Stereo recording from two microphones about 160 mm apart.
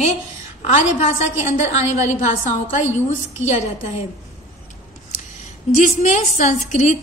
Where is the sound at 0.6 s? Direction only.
45° left (ahead or behind).